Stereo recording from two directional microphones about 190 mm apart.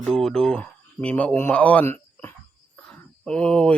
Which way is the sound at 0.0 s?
5° left (ahead or behind).